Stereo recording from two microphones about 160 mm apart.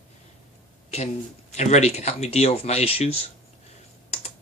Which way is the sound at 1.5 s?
45° left (ahead or behind).